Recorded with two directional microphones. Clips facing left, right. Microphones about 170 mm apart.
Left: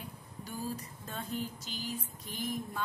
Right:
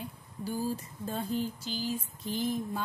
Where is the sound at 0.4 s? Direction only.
30° right (ahead or behind).